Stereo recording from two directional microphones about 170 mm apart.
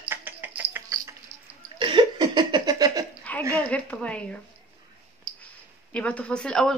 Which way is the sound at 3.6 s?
5° left (ahead or behind).